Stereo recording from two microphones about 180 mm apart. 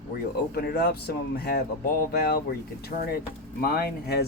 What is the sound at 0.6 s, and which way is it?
Speech, 60° left (ahead or behind).